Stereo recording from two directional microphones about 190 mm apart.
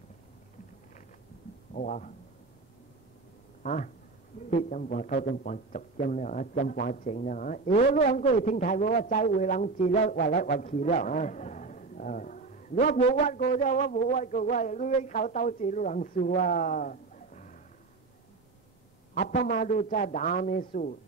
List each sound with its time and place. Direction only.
1.7 s a man's voice: 45° left (ahead or behind)
3.6 s a man's voice: 40° left (ahead or behind)
19.1 s a man's voice: 45° left (ahead or behind)